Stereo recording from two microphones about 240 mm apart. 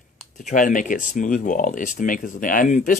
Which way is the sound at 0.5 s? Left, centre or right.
Left.